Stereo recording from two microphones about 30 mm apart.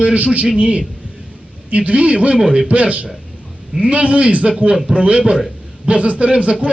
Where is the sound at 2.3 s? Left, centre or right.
Right.